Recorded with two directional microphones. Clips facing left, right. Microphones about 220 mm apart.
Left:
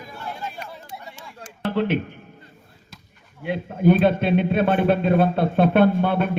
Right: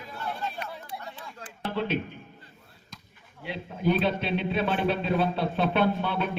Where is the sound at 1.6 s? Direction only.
60° left (ahead or behind).